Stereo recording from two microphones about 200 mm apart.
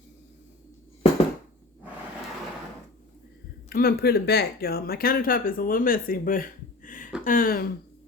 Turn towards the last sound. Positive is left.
turn(degrees=45)  # may be behind; listen again after turning